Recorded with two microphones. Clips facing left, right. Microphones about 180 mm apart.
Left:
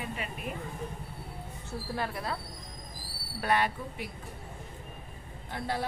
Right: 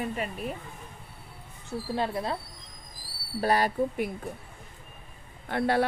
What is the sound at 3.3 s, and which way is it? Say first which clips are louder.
Speech: right 3 dB; 35° right (ahead or behind).